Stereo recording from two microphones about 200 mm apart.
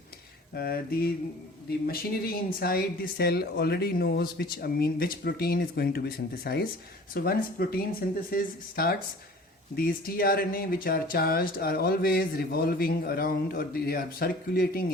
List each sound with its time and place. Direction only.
0.5 s speech: 50° left (ahead or behind)